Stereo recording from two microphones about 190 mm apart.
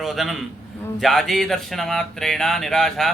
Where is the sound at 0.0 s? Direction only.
Centre (ahead or behind).